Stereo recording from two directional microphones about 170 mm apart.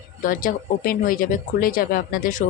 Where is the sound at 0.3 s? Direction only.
55° left (ahead or behind).